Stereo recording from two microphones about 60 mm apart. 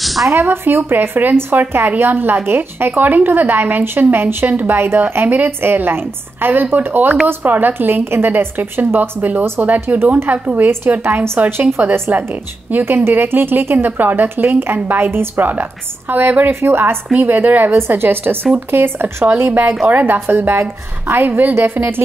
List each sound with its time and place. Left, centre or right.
0.0 s a sound: centre
0.3 s speech: right
0.7 s speech: right
2.9 s a woman's voice: right
11.5 s speech: right
12.1 s a woman's voice: right
17.1 s a woman's voice: right
20.2 s speech: right